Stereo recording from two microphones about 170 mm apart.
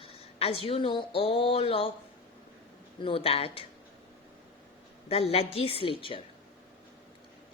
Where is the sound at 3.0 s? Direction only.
35° left (ahead or behind).